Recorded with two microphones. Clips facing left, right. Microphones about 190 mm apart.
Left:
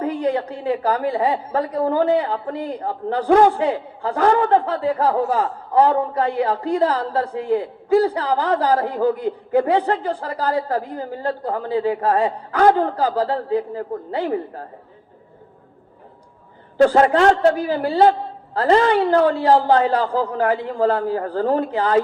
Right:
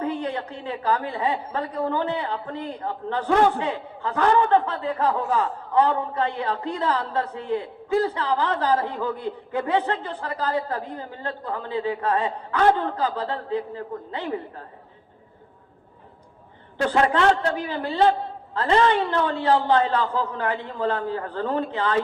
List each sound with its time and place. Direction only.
0.0 s a woman's voice: 35° left (ahead or behind)
16.8 s a woman's voice: 40° left (ahead or behind)